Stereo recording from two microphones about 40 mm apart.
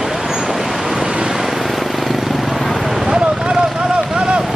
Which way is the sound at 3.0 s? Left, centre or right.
Right.